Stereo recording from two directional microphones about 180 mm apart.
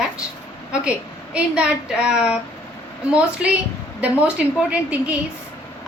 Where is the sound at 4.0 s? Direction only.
10° right (ahead or behind).